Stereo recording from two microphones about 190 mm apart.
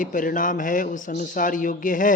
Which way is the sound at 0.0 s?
45° left (ahead or behind).